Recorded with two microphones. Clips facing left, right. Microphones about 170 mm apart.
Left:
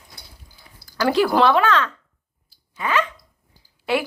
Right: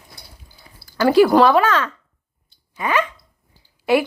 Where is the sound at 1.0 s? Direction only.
5° right (ahead or behind).